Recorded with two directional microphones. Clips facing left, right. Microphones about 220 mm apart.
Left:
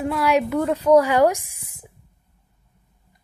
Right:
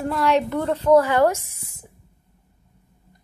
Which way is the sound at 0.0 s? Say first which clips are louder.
Even; 10° left (ahead or behind).